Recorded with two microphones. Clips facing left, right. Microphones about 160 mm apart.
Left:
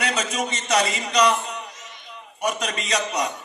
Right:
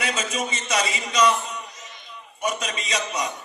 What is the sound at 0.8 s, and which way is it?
A man's voice, 55° left (ahead or behind).